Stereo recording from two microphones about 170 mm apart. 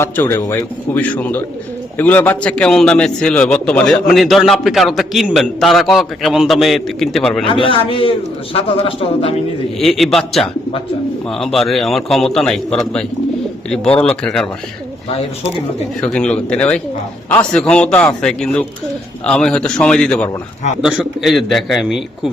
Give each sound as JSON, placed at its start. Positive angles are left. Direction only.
{"t": 0.0, "sound": "a man's voice", "side_deg": 15}
{"t": 7.4, "sound": "speech", "side_deg": 30}
{"t": 9.7, "sound": "a man's voice", "side_deg": 0}
{"t": 16.0, "sound": "a man's voice", "side_deg": 5}